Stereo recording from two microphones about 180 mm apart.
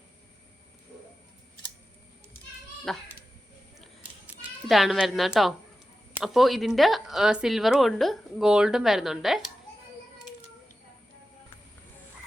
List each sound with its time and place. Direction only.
2.9 s speech: centre (ahead or behind)
4.7 s speech: centre (ahead or behind)